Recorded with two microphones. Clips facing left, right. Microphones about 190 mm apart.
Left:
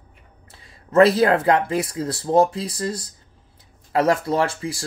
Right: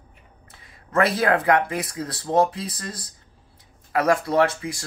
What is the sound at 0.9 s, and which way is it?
Speech, 30° left (ahead or behind).